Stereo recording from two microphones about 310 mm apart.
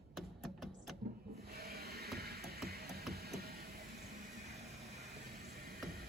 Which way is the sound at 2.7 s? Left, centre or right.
Right.